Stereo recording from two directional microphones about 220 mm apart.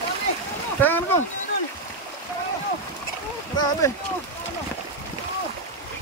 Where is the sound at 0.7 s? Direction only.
10° left (ahead or behind).